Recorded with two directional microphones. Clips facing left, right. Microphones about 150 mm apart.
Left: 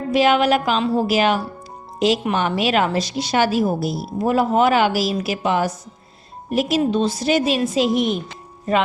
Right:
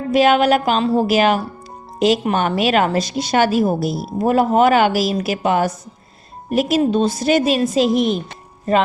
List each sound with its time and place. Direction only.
0.1 s a woman's voice: 50° right (ahead or behind)